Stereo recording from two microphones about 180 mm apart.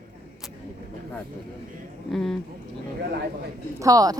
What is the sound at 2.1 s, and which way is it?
Speech, centre (ahead or behind).